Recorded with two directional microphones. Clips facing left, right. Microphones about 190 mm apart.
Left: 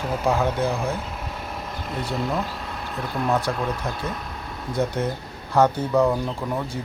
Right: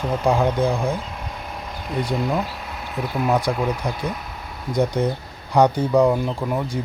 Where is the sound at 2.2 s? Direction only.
Centre (ahead or behind).